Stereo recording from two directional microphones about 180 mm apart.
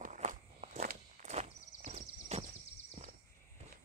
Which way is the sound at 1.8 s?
40° right (ahead or behind).